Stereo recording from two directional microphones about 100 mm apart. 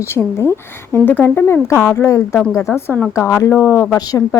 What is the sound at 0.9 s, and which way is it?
Speech, 20° left (ahead or behind).